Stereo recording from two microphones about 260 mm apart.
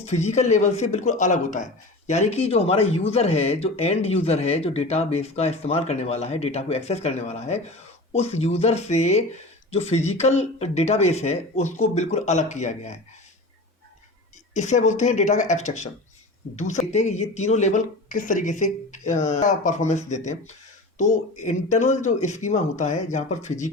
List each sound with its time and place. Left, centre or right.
0.0 s speech: left
14.5 s speech: left
16.9 s speech: left